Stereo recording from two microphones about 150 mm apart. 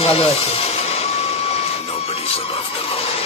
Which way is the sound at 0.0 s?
40° left (ahead or behind).